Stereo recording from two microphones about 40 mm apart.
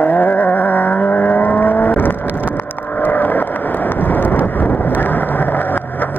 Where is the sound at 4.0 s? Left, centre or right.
Left.